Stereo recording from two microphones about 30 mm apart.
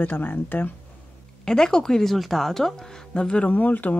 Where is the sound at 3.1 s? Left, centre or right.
Left.